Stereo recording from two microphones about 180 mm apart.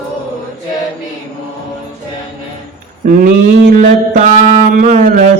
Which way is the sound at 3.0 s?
50° right (ahead or behind).